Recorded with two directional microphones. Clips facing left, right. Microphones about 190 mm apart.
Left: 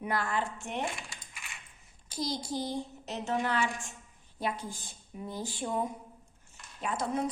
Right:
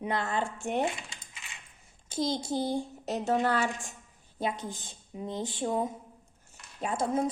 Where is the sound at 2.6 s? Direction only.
50° right (ahead or behind).